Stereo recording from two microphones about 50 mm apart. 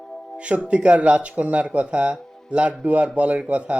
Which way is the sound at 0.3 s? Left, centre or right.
Right.